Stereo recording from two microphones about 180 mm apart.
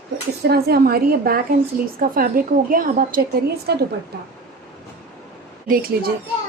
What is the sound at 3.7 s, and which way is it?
Speech, 60° right (ahead or behind).